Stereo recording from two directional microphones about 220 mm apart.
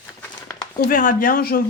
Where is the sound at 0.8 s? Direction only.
40° left (ahead or behind).